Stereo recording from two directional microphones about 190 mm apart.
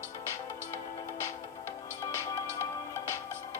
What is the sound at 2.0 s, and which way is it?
Music, 15° left (ahead or behind).